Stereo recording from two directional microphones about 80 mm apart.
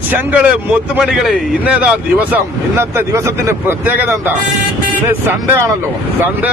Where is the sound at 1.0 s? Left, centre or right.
Centre.